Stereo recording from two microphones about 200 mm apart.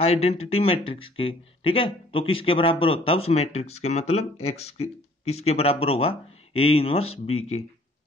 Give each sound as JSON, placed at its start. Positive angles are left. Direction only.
{"t": 0.0, "sound": "speech", "side_deg": 30}